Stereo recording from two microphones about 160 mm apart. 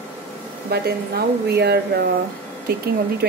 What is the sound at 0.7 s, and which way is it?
A woman's voice, 80° right.